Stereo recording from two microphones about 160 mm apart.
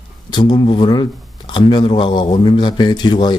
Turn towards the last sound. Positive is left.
turn(degrees=30)  # may be behind; listen again after turning